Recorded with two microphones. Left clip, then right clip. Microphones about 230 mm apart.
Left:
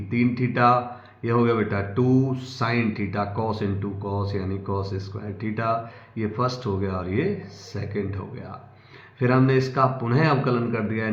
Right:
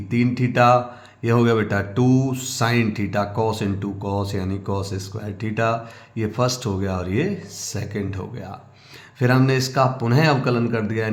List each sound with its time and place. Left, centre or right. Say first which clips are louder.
0.1 s speech: right 2 dB; right
9.2 s speech: right 1 dB; right